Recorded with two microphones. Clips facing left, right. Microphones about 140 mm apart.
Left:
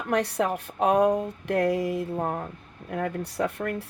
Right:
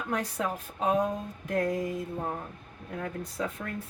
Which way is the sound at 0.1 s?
75° left (ahead or behind).